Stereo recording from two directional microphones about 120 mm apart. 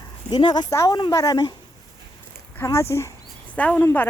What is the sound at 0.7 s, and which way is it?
Speech, 25° left (ahead or behind).